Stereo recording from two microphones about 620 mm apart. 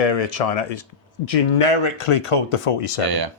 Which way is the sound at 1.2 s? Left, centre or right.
Left.